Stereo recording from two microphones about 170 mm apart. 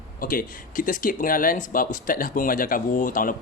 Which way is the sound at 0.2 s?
55° left (ahead or behind).